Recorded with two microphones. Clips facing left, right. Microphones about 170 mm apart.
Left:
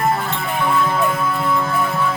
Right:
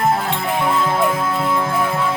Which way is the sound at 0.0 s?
20° right (ahead or behind).